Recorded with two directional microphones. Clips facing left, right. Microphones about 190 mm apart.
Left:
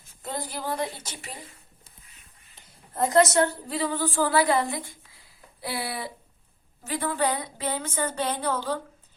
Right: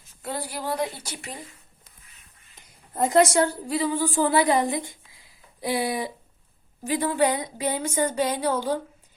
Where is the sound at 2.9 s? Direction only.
15° right (ahead or behind).